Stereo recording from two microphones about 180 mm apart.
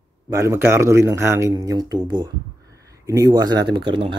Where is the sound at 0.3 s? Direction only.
15° right (ahead or behind).